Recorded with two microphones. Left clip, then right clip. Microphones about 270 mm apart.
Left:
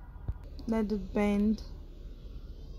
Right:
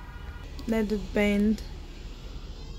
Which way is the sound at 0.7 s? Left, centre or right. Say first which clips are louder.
Right 4 dB; centre.